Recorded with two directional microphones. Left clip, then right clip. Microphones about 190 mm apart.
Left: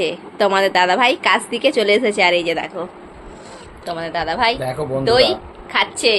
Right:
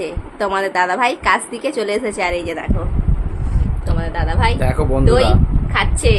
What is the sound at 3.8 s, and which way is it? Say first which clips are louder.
Speech: left 3 dB; 25° left (ahead or behind).